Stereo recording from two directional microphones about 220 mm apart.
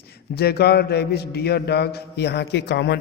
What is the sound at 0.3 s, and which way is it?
A man's voice, 45° left (ahead or behind).